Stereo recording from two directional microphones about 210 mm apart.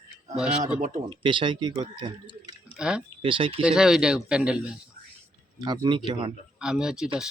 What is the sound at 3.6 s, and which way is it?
Speech, 5° right (ahead or behind).